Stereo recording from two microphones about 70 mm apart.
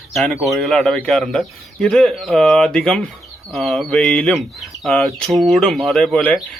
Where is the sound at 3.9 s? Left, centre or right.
Centre.